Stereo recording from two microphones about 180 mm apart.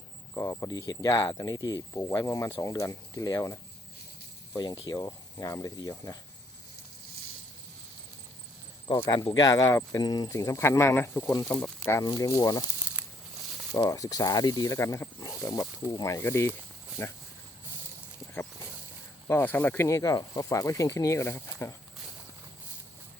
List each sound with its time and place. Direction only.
0.3 s speech: 15° left (ahead or behind)
8.9 s speech: 25° left (ahead or behind)
12.8 s a sound: 10° right (ahead or behind)
13.7 s speech: 20° left (ahead or behind)
19.3 s speech: 10° left (ahead or behind)